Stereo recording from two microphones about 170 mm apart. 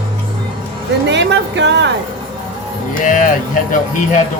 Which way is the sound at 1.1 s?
90° right.